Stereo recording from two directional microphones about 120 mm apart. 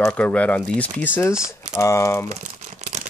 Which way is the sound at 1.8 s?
25° left (ahead or behind).